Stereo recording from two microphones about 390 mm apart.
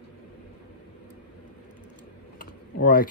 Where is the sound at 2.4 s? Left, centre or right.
Left.